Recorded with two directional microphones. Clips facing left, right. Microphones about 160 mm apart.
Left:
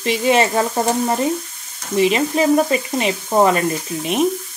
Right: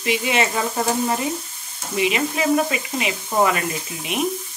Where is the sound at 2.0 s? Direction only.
35° left (ahead or behind).